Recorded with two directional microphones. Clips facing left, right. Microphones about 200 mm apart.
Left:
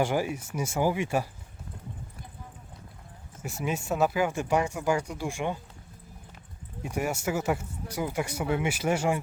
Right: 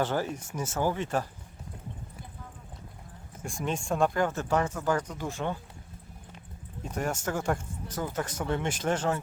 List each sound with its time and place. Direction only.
0.0 s speech: 10° left (ahead or behind)
3.4 s speech: 5° left (ahead or behind)
6.8 s speech: 10° left (ahead or behind)